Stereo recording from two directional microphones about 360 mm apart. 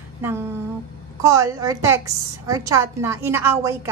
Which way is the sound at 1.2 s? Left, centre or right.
Centre.